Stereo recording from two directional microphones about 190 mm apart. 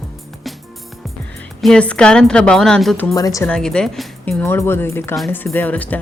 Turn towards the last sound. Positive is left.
turn(degrees=10)  # may be behind; listen again after turning